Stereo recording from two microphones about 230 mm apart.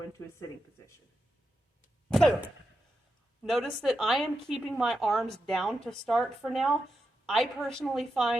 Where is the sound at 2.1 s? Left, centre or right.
Centre.